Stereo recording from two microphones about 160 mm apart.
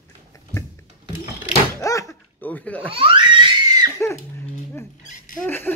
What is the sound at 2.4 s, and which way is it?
Speech, 10° left (ahead or behind).